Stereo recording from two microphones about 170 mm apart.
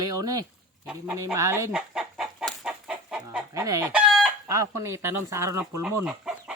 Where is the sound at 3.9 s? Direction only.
Centre (ahead or behind).